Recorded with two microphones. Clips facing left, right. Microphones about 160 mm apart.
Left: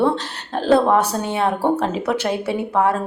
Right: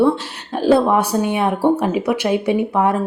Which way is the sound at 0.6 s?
10° right (ahead or behind).